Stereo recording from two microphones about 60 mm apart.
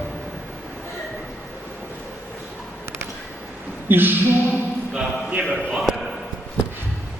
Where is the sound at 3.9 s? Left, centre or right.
Right.